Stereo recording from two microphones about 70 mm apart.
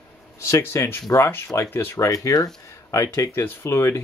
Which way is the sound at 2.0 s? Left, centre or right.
Left.